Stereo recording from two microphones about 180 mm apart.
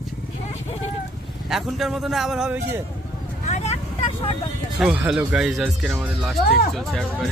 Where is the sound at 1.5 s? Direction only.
Centre (ahead or behind).